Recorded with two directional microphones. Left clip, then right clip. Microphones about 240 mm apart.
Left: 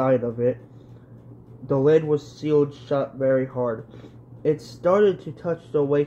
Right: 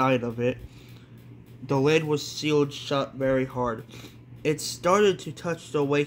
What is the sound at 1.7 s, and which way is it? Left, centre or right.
Speech, centre.